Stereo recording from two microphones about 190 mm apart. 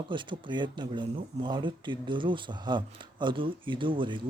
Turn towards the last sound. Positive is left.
turn(degrees=-25)  # may be behind; listen again after turning